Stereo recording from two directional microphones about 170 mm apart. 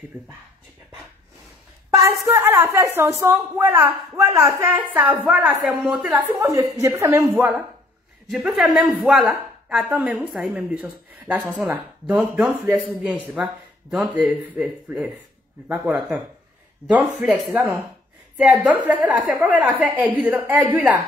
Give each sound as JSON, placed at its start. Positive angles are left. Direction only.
{"t": 2.0, "sound": "a woman's voice", "side_deg": -20}
{"t": 11.3, "sound": "speech", "side_deg": -20}
{"t": 11.7, "sound": "a woman's voice", "side_deg": -5}
{"t": 17.2, "sound": "a woman's voice", "side_deg": -5}